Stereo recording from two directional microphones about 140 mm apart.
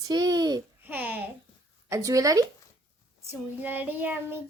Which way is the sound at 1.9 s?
25° right (ahead or behind).